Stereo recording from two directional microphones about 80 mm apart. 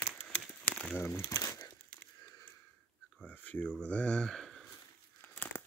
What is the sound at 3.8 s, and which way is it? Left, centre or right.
Speech, centre.